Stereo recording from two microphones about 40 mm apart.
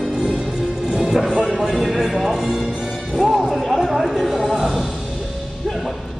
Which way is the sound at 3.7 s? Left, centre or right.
Centre.